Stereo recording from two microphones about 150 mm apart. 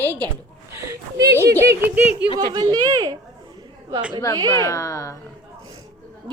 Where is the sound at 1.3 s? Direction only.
15° right (ahead or behind).